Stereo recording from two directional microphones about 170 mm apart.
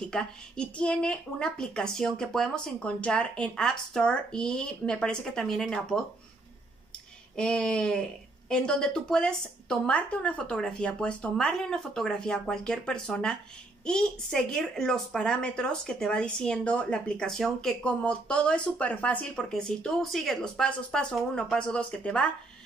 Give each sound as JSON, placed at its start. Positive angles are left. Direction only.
{"t": 0.1, "sound": "a woman's voice", "side_deg": 5}
{"t": 7.3, "sound": "a woman's voice", "side_deg": 5}